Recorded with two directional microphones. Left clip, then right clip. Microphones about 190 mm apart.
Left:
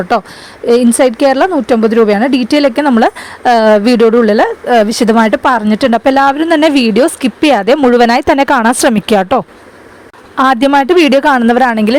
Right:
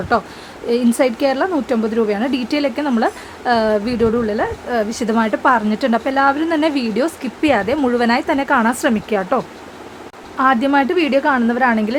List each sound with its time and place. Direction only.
0.7 s speech: 40° left (ahead or behind)